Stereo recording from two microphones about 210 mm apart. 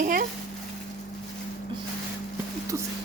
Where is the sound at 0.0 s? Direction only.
40° right (ahead or behind).